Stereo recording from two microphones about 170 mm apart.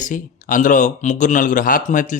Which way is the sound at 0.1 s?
50° left (ahead or behind).